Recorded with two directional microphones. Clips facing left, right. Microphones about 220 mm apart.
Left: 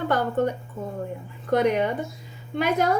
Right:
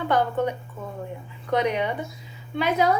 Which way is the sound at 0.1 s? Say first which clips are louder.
Right 1 dB; 45° left (ahead or behind).